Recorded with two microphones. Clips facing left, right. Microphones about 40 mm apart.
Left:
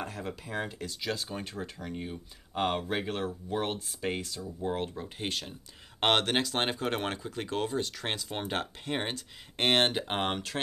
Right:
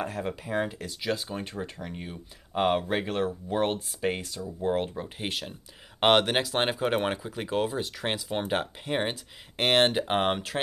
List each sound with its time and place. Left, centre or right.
0.2 s speech: centre